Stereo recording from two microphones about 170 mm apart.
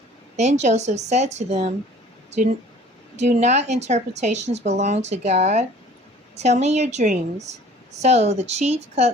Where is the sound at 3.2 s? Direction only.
40° right (ahead or behind).